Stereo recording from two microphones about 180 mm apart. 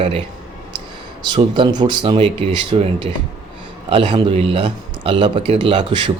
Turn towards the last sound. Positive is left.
turn(degrees=-25)  # may be behind; listen again after turning